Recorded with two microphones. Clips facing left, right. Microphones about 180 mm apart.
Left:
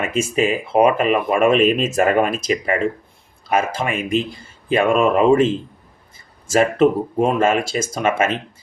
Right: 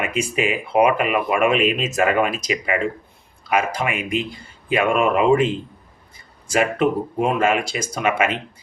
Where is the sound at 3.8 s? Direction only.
30° left (ahead or behind).